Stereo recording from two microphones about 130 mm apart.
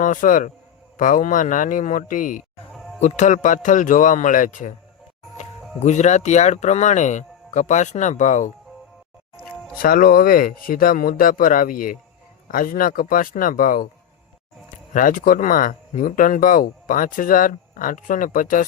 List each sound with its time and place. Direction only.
0.0 s a man's voice: 90° left
2.7 s music: centre (ahead or behind)
3.0 s a man's voice: 65° left (ahead or behind); by 4.7 s 90° left
5.8 s speech: 65° left (ahead or behind)
9.8 s speech: 90° left
14.9 s speech: 90° left